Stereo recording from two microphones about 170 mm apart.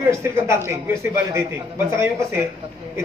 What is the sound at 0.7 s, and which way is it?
A man's voice, 15° right (ahead or behind).